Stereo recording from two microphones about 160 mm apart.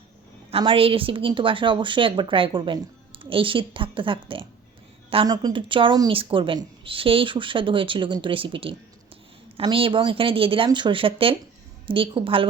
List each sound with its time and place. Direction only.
0.5 s a woman's voice: 35° right (ahead or behind)